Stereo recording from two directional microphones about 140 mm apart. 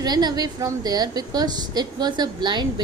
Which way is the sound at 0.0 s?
30° right (ahead or behind).